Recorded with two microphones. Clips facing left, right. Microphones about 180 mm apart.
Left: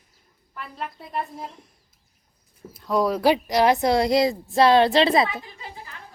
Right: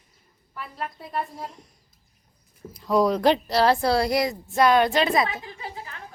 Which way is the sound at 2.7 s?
Centre (ahead or behind).